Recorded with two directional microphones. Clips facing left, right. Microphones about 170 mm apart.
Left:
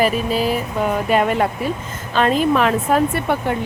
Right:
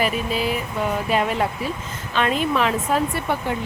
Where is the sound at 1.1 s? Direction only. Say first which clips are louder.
Left 5 dB; 55° left (ahead or behind).